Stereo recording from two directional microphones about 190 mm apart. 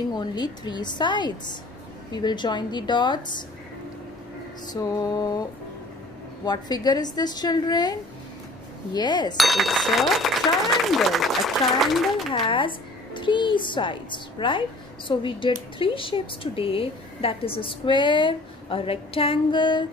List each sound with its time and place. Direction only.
0.1 s speech: 20° left (ahead or behind)
4.7 s speech: 20° left (ahead or behind)
6.4 s speech: 20° left (ahead or behind)
8.9 s speech: 20° left (ahead or behind)
9.4 s speech: centre (ahead or behind)
12.3 s speech: 25° left (ahead or behind)